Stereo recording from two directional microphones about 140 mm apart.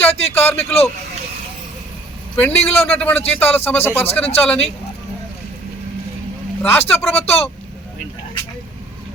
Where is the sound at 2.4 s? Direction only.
10° left (ahead or behind).